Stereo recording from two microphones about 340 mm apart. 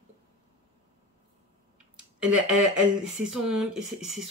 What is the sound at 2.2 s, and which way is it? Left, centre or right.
Speech, centre.